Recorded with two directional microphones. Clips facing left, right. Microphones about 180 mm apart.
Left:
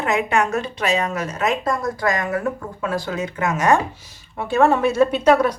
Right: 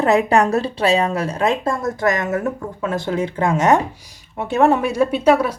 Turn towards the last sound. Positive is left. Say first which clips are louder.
# even
turn(degrees=-5)  # may be behind; listen again after turning